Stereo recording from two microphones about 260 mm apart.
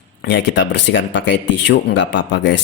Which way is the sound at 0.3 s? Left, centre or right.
Left.